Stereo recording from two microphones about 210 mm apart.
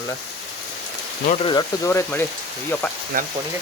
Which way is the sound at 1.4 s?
20° left (ahead or behind).